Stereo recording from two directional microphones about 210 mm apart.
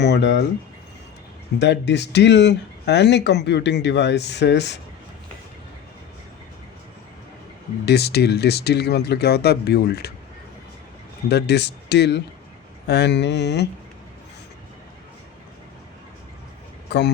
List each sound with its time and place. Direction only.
0.0 s speech: 55° left (ahead or behind)
1.5 s speech: 55° left (ahead or behind)
7.9 s speech: 50° left (ahead or behind)
11.3 s speech: 50° left (ahead or behind)